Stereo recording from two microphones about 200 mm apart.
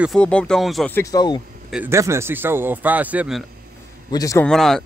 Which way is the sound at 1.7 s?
10° right (ahead or behind).